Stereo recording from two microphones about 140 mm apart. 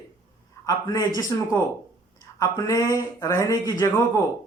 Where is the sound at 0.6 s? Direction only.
25° left (ahead or behind).